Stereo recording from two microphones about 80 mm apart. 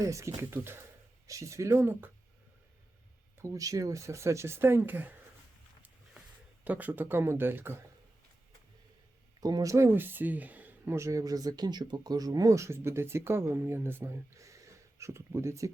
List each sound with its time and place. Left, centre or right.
0.0 s speech: right
0.5 s speech: right
3.3 s speech: right
6.7 s speech: right
9.4 s speech: right
9.7 s speech: right
10.9 s speech: right